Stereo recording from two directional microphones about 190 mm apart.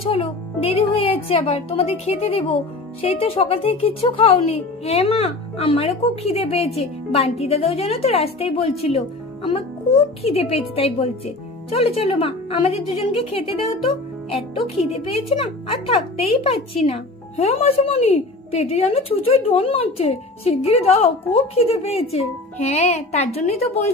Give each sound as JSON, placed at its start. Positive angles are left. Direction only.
{"t": 0.0, "sound": "speech", "side_deg": 30}
{"t": 11.7, "sound": "speech", "side_deg": 30}
{"t": 14.8, "sound": "speech", "side_deg": 30}